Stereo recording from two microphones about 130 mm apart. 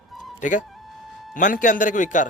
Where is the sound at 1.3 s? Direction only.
90° left.